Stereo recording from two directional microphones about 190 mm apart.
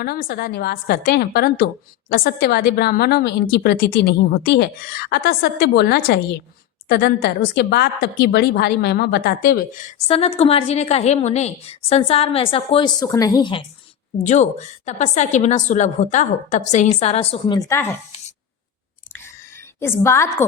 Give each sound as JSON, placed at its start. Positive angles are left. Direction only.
{"t": 0.0, "sound": "a woman's voice", "side_deg": 55}
{"t": 10.1, "sound": "a woman's voice", "side_deg": 30}
{"t": 14.8, "sound": "a woman's voice", "side_deg": 40}
{"t": 17.6, "sound": "a woman's voice", "side_deg": 15}
{"t": 19.8, "sound": "a woman's voice", "side_deg": 15}